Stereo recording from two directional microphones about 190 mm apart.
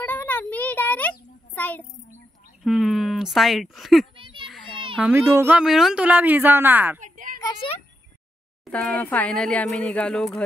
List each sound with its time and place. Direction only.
0.0 s a sound: 10° left (ahead or behind)
1.5 s child singing: 10° left (ahead or behind)
2.6 s speech: centre (ahead or behind)
4.2 s children playing: 25° right (ahead or behind)
4.9 s speech: 10° right (ahead or behind)
7.0 s a sound: 45° right (ahead or behind)
8.6 s speech: 5° left (ahead or behind)